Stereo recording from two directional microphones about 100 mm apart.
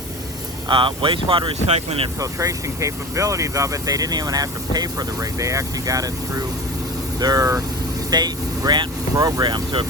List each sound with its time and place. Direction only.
0.7 s speech: 60° right (ahead or behind); by 2.0 s 90° right
2.1 s speech: 35° right (ahead or behind)